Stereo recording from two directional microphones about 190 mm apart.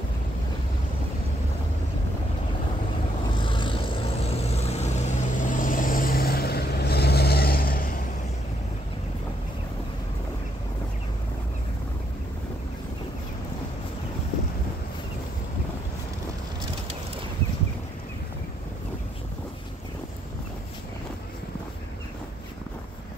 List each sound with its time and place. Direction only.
3.3 s vehicle: 25° left (ahead or behind); by 8.0 s 50° left (ahead or behind)